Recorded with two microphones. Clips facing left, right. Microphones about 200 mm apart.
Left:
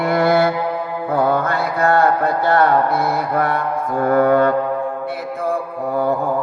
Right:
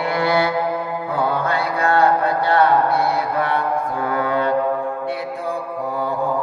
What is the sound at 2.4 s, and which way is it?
Speech, 50° left (ahead or behind).